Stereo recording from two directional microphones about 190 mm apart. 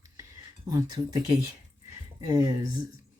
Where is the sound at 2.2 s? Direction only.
20° right (ahead or behind).